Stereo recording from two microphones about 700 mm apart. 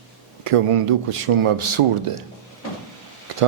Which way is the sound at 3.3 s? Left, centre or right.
Right.